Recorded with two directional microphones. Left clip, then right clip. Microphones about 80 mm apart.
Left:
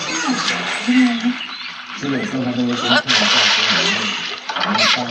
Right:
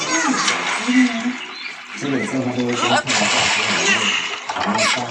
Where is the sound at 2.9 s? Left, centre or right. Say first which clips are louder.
Left 5 dB; right.